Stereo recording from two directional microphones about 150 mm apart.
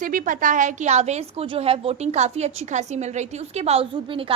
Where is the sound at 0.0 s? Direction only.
65° right (ahead or behind).